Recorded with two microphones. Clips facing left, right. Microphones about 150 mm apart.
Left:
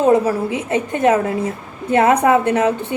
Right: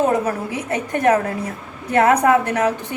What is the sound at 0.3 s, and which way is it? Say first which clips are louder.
A woman's voice: left 4 dB; 25° left (ahead or behind).